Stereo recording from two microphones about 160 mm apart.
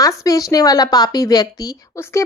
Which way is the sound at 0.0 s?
20° left (ahead or behind).